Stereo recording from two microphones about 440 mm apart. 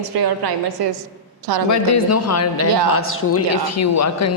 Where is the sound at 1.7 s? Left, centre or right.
Left.